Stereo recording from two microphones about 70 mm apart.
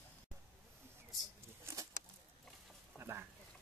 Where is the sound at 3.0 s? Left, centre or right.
Right.